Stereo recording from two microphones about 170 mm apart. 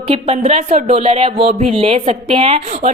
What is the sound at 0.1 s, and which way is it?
A woman's voice, 35° right (ahead or behind).